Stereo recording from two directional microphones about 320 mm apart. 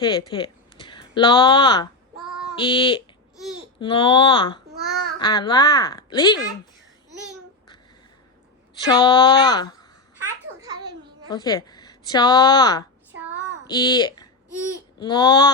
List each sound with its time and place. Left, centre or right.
0.0 s speech: centre
8.9 s speech: centre
10.2 s babbling: centre
11.3 s a woman's voice: centre